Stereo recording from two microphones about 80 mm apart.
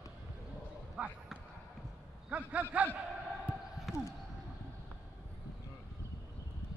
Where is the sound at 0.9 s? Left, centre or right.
Centre.